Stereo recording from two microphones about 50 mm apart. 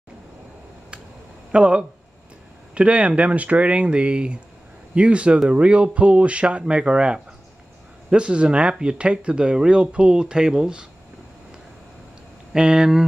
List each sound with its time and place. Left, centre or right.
1.5 s speech: right
12.5 s speech: centre